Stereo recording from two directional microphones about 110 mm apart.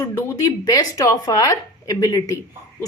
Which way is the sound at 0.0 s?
25° left (ahead or behind).